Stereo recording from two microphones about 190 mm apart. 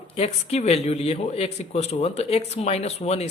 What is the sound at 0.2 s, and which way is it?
A man's voice, 35° left (ahead or behind).